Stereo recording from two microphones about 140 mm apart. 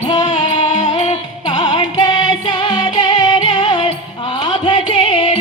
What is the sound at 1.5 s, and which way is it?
Music, 30° left (ahead or behind).